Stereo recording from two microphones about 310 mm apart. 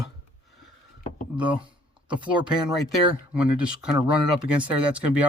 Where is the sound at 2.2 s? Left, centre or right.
Centre.